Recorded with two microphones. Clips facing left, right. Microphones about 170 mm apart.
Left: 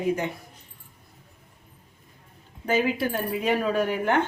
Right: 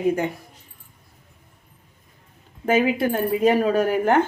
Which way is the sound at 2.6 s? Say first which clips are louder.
Right 5 dB; 50° right (ahead or behind).